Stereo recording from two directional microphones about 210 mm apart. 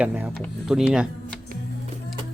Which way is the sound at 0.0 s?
10° right (ahead or behind).